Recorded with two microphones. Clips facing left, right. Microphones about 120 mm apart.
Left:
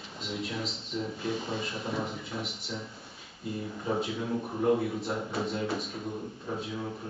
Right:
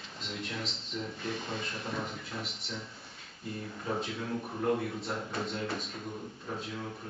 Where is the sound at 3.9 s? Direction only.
5° left (ahead or behind).